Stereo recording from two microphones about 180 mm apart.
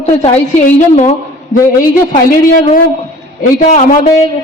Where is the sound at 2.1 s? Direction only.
45° left (ahead or behind).